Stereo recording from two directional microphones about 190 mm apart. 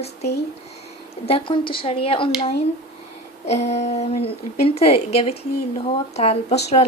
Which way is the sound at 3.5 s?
35° left (ahead or behind).